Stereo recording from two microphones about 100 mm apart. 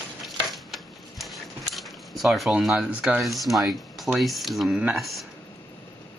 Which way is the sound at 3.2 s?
Centre (ahead or behind).